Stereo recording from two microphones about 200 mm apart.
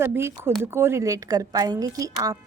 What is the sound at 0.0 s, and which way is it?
Speech, 10° right (ahead or behind).